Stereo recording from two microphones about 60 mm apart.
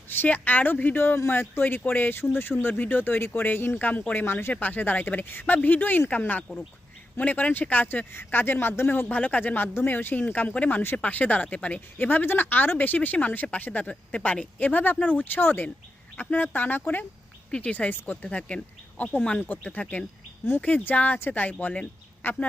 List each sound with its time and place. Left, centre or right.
0.1 s speech: left
11.9 s speech: left; by 19.4 s centre
19.5 s speech: left
19.8 s speech: centre
22.2 s speech: left